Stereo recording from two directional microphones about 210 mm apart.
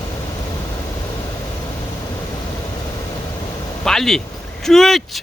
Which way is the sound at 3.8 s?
Centre (ahead or behind).